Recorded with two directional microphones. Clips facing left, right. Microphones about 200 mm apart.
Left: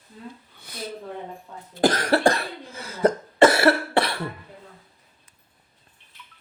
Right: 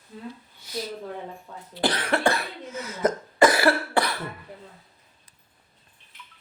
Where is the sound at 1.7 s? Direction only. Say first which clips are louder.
Left 5 dB; 45° left (ahead or behind); by 4.2 s 25° left (ahead or behind).